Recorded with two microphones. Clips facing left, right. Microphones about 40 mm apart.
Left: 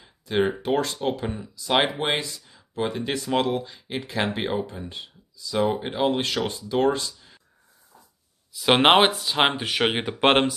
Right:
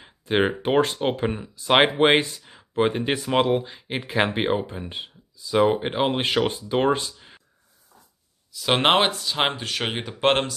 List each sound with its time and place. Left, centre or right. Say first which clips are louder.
0.0 s speech: right 2 dB; right
8.5 s speech: left 2 dB; centre